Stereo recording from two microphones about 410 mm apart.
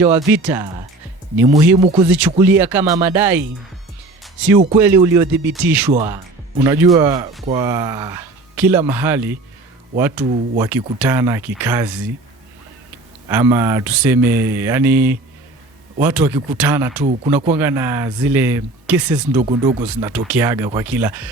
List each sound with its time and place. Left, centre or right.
0.0 s speech: centre
2.0 s speech: centre
4.2 s music: centre
4.6 s speech: centre
10.5 s speech: centre
13.2 s speech: centre
17.0 s speech: centre
17.6 s speech: centre
19.4 s speech: centre
19.8 s speech: centre